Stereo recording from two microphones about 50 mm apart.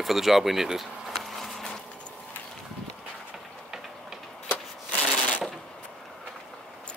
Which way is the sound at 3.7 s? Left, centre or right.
Centre.